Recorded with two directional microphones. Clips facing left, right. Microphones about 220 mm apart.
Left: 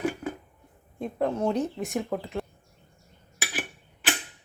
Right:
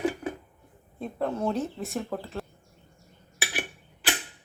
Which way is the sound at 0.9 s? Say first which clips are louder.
Left 2 dB; 15° left (ahead or behind).